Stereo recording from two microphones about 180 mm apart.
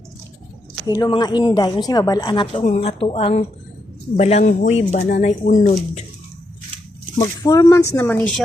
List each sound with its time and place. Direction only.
0.9 s speech: 20° left (ahead or behind); by 6.0 s 40° left (ahead or behind)
7.2 s speech: 20° left (ahead or behind)